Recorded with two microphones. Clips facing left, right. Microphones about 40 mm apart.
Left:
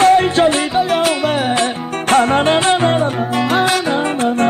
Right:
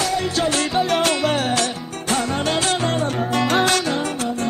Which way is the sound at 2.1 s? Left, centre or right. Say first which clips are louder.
Left 9 dB; left.